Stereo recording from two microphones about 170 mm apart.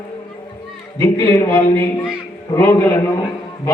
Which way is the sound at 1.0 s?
15° left (ahead or behind).